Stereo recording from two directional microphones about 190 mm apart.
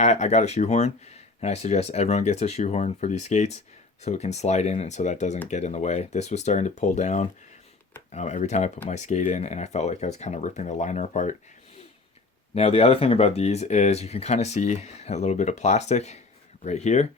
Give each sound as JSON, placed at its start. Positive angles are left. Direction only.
{"t": 0.0, "sound": "speech", "side_deg": 35}
{"t": 12.5, "sound": "speech", "side_deg": 30}